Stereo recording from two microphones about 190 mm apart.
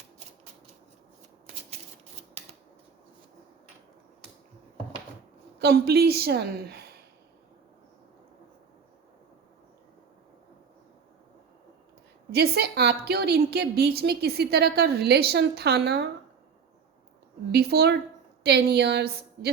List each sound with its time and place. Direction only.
5.5 s a woman's voice: 55° right (ahead or behind)
12.3 s a woman's voice: 60° right (ahead or behind)
17.5 s a woman's voice: 55° right (ahead or behind)